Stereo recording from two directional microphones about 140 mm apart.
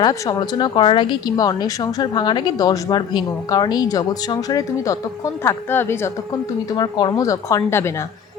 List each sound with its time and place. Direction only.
0.0 s a woman's voice: 30° left (ahead or behind)
6.7 s a woman's voice: 30° left (ahead or behind)